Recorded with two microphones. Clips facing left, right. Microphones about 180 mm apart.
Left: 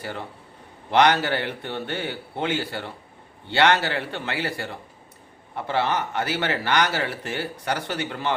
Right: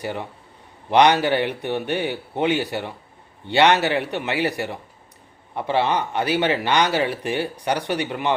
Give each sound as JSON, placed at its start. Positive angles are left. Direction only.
{"t": 0.0, "sound": "a man's voice", "side_deg": -20}